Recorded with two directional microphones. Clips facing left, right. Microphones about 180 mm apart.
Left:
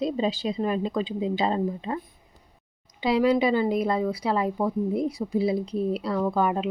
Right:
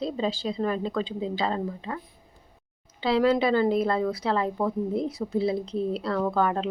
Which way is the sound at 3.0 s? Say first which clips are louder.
Left 1 dB; 15° left (ahead or behind).